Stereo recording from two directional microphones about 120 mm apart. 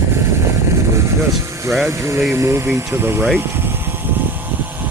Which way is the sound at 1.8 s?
25° right (ahead or behind).